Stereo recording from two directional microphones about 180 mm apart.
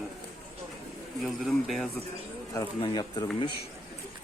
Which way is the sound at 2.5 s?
20° left (ahead or behind).